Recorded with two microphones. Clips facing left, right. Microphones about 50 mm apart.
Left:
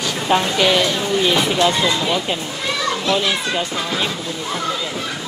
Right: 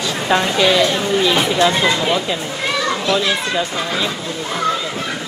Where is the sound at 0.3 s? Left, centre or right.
Right.